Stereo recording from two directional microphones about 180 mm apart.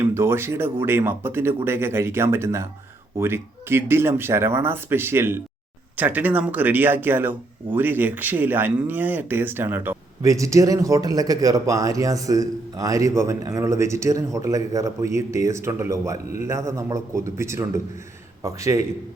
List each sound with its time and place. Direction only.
0.0 s speech: 15° right (ahead or behind)